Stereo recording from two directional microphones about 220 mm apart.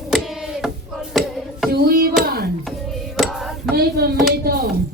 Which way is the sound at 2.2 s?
45° right (ahead or behind).